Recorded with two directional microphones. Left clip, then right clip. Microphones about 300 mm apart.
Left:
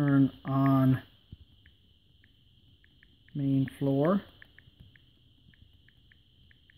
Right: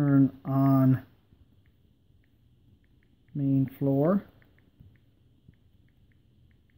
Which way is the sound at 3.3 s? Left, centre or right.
Centre.